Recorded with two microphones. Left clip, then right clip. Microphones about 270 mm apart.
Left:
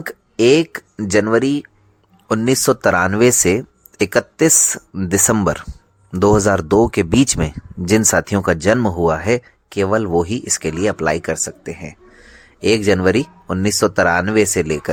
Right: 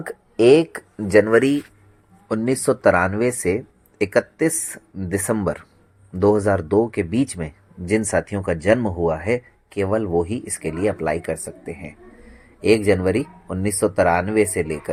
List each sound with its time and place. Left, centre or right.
0.0 s speech: left